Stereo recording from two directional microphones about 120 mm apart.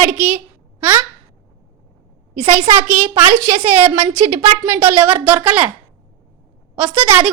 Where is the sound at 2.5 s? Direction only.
15° right (ahead or behind).